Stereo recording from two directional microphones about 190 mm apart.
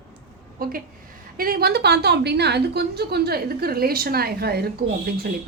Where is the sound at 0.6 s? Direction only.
50° right (ahead or behind).